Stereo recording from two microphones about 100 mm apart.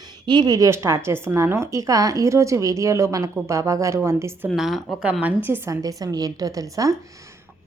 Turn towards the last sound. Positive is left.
turn(degrees=-35)  # may be behind; listen again after turning